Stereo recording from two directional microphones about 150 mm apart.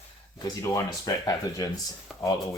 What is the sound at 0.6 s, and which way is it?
Speech, 25° left (ahead or behind).